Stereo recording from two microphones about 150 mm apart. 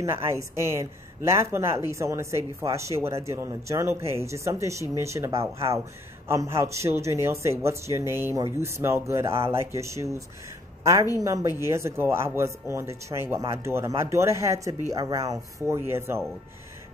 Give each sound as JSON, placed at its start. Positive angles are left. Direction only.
{"t": 0.0, "sound": "a woman's voice", "side_deg": -20}